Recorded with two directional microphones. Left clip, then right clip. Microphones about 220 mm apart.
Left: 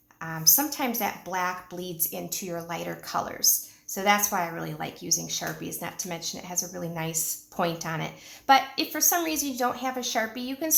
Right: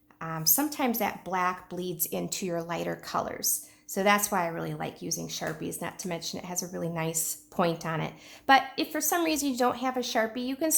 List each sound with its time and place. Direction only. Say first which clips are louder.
0.2 s speech: left 4 dB; 35° right (ahead or behind)